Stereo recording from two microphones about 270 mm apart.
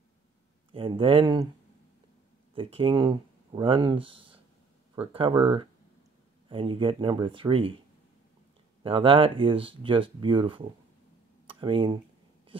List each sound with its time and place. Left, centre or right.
0.7 s speech: centre
2.5 s speech: centre
8.8 s speech: centre